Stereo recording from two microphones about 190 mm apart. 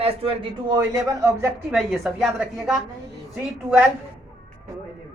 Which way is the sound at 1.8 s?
Centre (ahead or behind).